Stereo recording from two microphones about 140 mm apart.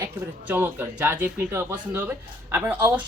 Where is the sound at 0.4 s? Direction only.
10° right (ahead or behind).